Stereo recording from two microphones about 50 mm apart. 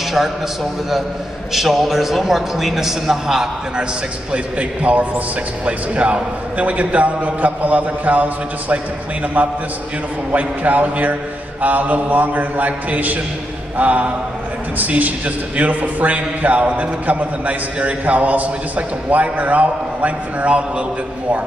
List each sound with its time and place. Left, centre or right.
1.5 s a man's voice: centre
4.3 s a man's voice: right
10.3 s a man's voice: right